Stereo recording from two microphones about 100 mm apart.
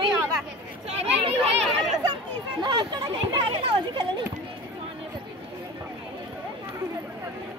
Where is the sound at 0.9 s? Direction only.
90° right.